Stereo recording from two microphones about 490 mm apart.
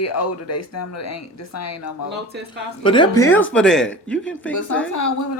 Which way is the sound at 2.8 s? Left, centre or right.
Centre.